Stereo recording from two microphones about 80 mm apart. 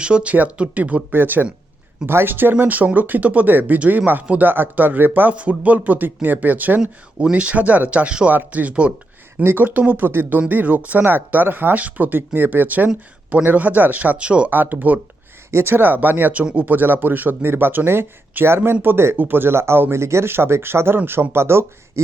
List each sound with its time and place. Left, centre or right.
0.0 s speech: centre; by 22.0 s right